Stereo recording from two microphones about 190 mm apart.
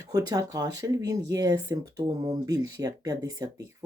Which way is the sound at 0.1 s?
20° right (ahead or behind).